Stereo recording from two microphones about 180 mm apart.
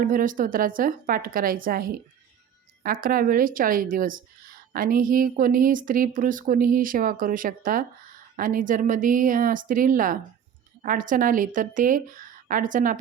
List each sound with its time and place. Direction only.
0.0 s speech: 50° right (ahead or behind)